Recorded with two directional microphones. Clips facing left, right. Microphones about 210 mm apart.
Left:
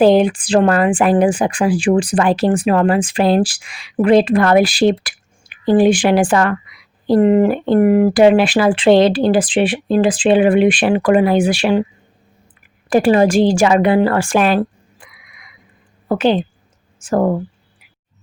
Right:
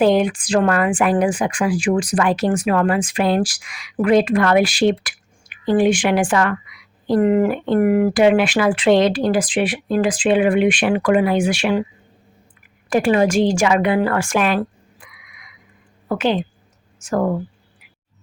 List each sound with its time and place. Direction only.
0.0 s speech: 30° left (ahead or behind)
12.9 s a woman's voice: 35° left (ahead or behind)